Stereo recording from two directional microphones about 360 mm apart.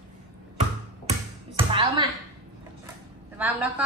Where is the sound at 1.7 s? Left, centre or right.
Centre.